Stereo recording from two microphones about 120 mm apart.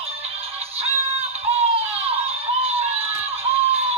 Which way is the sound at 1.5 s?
55° right (ahead or behind).